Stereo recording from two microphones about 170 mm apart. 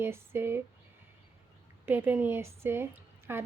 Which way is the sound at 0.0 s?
15° right (ahead or behind).